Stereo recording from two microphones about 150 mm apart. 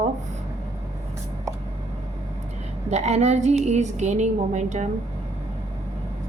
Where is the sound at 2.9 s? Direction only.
50° right (ahead or behind).